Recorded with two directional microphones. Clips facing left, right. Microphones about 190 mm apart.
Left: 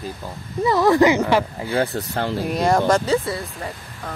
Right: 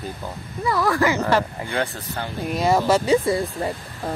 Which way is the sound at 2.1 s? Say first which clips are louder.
Left 6 dB; 65° left (ahead or behind).